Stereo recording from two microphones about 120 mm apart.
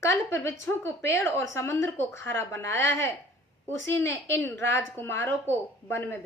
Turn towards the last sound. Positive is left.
turn(degrees=20)  # may be behind; listen again after turning